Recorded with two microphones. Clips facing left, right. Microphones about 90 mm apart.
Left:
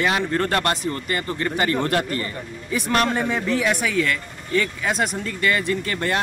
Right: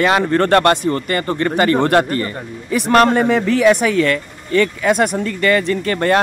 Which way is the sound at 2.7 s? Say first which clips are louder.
Right 9 dB; 75° right (ahead or behind).